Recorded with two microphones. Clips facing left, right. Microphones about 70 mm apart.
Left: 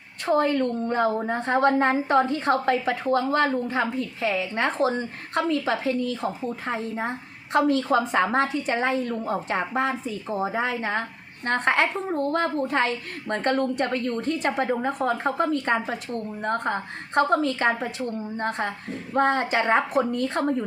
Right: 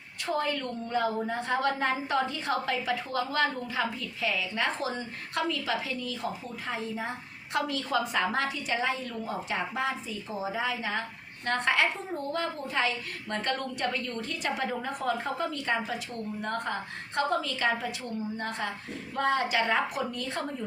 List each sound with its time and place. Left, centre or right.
0.3 s a woman's voice: left